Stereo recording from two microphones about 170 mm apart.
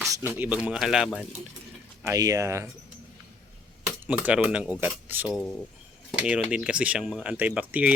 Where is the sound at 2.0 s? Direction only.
20° right (ahead or behind).